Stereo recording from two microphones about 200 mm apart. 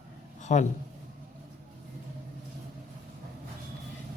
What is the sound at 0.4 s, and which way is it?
Speech, 35° left (ahead or behind).